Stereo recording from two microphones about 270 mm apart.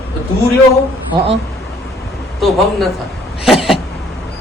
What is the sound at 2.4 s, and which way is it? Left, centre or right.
Speech, centre.